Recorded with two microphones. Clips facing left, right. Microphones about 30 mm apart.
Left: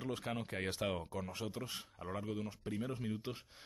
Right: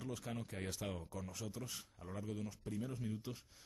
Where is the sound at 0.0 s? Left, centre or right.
Left.